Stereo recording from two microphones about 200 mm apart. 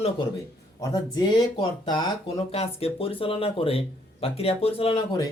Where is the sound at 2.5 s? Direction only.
30° left (ahead or behind).